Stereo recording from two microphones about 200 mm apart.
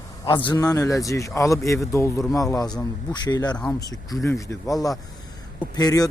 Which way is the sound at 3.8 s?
15° left (ahead or behind).